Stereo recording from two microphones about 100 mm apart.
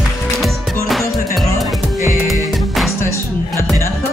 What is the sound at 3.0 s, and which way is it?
Music, 30° left (ahead or behind).